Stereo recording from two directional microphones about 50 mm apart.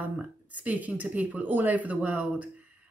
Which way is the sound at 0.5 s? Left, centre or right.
Right.